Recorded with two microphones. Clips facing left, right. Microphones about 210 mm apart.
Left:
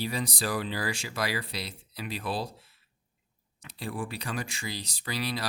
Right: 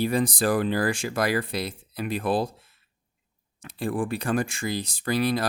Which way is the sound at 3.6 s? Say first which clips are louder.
Right 8 dB; 50° right (ahead or behind).